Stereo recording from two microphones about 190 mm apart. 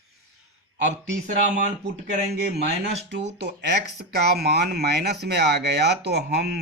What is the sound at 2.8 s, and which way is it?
Speech, 65° right (ahead or behind).